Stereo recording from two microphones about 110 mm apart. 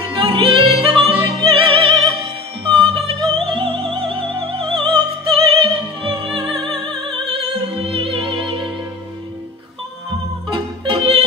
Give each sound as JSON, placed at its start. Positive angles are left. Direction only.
{"t": 0.1, "sound": "music", "side_deg": -50}
{"t": 10.5, "sound": "music", "side_deg": -50}